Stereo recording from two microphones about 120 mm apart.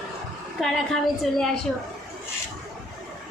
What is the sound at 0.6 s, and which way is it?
Speech, centre (ahead or behind).